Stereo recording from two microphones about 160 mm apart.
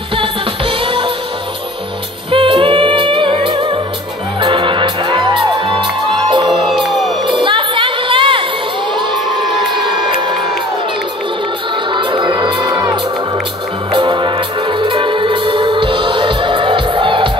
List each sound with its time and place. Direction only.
0.2 s music: 35° right (ahead or behind)
2.3 s music: 35° right (ahead or behind)
6.7 s music: centre (ahead or behind)
7.2 s music: 30° right (ahead or behind)
9.1 s crowd: centre (ahead or behind)
11.9 s music: 30° right (ahead or behind)
13.9 s music: 30° right (ahead or behind)